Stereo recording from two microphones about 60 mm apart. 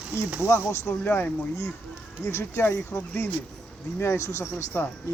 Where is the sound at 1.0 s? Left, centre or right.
Left.